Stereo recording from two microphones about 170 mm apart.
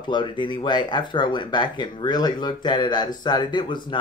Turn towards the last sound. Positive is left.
turn(degrees=30)  # may be behind; listen again after turning